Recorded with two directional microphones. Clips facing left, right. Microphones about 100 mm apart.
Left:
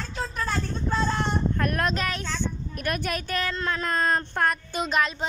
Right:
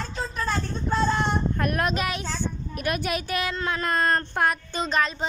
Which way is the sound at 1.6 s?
10° right (ahead or behind).